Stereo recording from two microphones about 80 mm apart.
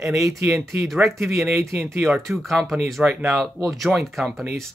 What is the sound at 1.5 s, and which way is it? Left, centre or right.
Speech, right.